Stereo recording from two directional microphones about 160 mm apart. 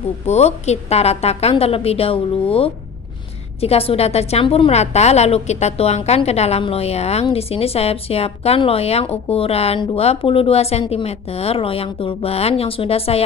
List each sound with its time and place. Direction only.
0.3 s a woman's voice: 45° left (ahead or behind)